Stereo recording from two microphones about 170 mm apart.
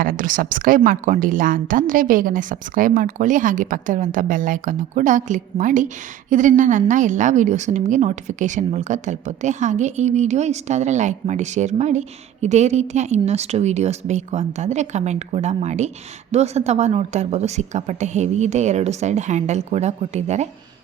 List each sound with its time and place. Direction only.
0.0 s a woman's voice: 55° right (ahead or behind)